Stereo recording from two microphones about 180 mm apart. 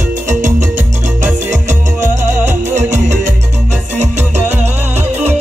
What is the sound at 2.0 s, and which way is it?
Music, 40° right (ahead or behind).